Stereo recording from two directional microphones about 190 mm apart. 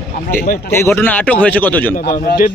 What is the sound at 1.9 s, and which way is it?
Speech, 45° left (ahead or behind).